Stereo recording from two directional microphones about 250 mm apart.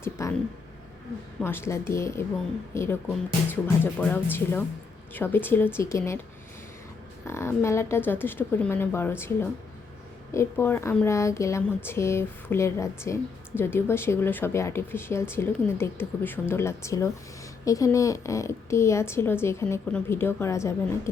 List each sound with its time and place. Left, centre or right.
0.0 s a sound: centre
1.4 s speech: centre
7.3 s speech: centre